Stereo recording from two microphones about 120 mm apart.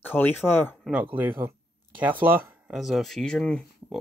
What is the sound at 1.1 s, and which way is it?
Speech, 15° right (ahead or behind).